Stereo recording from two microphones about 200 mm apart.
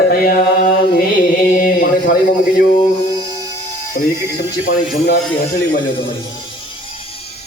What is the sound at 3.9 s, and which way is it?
Speech, 55° left (ahead or behind).